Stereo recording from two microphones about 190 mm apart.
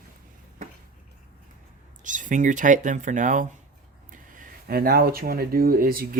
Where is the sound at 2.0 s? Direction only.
40° right (ahead or behind).